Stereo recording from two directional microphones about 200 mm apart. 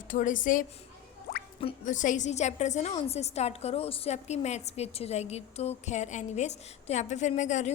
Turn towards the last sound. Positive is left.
turn(degrees=35)  # may be behind; listen again after turning